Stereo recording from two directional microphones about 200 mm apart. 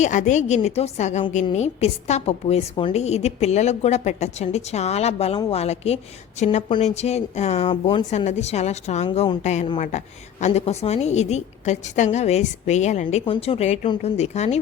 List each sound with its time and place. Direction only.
0.0 s a woman's voice: 40° left (ahead or behind)